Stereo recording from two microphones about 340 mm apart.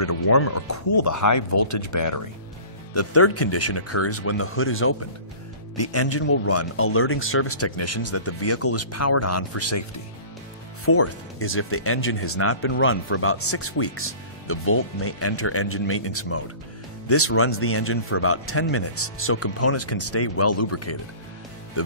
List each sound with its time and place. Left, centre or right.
0.0 s speech: left
2.9 s speech: left
10.9 s a man's voice: left
21.8 s music: left